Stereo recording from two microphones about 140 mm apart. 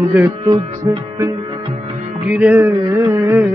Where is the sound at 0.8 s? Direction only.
35° right (ahead or behind).